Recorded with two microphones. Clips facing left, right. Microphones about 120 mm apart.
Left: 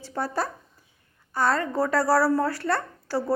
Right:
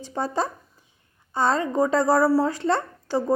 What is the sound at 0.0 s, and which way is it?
A woman's voice, 20° right (ahead or behind).